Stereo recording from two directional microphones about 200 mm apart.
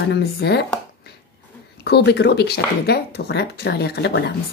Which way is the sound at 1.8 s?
55° left (ahead or behind).